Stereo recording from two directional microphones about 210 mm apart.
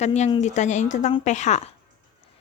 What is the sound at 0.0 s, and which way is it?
A woman's voice, 30° left (ahead or behind).